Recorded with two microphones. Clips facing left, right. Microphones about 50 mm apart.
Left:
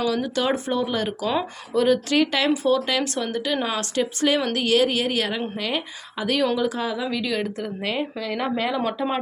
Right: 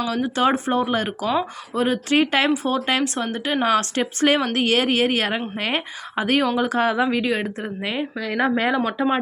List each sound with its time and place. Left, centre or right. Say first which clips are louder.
0.1 s speech: right 3 dB; right
7.8 s a woman's voice: right 1 dB; centre
8.5 s speech: right 4 dB; right